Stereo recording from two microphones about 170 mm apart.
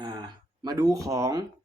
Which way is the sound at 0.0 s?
25° right (ahead or behind).